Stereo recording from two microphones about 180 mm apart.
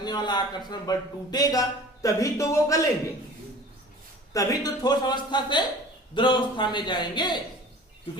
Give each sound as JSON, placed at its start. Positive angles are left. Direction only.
{"t": 0.0, "sound": "speech", "side_deg": 25}
{"t": 4.4, "sound": "speech", "side_deg": 20}